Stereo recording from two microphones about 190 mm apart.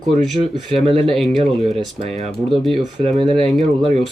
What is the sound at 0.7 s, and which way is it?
A man's voice, centre (ahead or behind).